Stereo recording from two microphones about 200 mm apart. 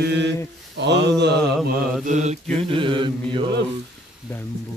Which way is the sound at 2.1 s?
35° right (ahead or behind).